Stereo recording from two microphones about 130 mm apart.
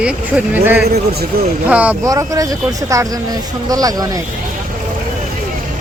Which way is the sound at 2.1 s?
25° right (ahead or behind).